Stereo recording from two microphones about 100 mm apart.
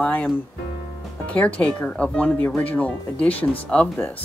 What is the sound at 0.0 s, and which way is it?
Speech, 15° left (ahead or behind).